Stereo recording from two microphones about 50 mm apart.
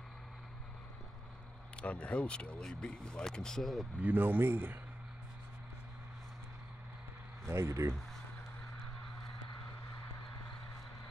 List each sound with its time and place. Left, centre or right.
1.8 s speech: left
4.0 s speech: right
7.4 s speech: right